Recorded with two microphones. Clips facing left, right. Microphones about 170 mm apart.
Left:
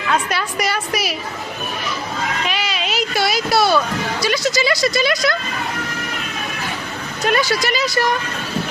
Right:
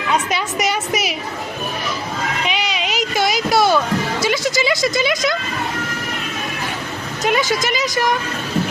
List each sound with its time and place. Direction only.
0.1 s a woman's voice: 20° right (ahead or behind)
2.5 s a sound: 15° right (ahead or behind)
4.2 s speech: 15° right (ahead or behind)
7.2 s speech: 15° right (ahead or behind)